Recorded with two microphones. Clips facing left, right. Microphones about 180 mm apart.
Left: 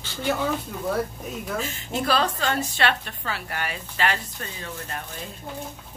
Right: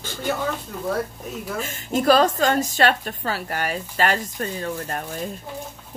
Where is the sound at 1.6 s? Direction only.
45° right (ahead or behind).